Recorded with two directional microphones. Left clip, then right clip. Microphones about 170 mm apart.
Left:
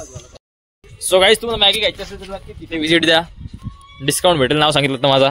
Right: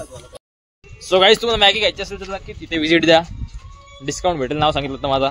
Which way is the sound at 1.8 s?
5° right (ahead or behind).